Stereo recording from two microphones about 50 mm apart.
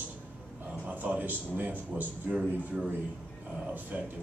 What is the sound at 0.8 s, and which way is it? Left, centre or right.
Speech, right.